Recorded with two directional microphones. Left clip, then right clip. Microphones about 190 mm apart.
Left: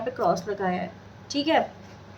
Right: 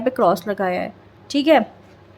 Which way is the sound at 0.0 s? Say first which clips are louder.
Right 7 dB; 60° right (ahead or behind).